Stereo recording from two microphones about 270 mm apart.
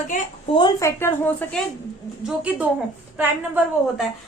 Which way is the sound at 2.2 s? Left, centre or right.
Centre.